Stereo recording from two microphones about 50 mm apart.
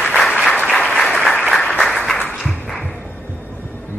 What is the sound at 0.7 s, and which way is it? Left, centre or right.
Applause, centre.